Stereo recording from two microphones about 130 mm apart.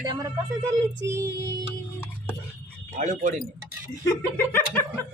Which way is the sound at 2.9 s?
65° right (ahead or behind).